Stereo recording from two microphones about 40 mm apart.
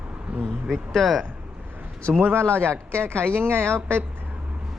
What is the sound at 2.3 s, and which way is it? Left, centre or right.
Speech, right.